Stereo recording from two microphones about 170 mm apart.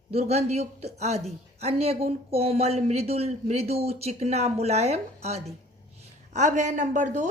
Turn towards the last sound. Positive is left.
turn(degrees=-45)  # may be behind; listen again after turning